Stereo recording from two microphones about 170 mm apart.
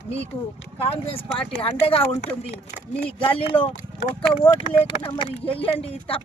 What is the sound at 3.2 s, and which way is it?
Speech, 30° left (ahead or behind).